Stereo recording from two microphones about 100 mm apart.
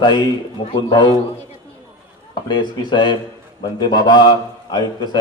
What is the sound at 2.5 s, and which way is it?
A man's voice, 50° left (ahead or behind).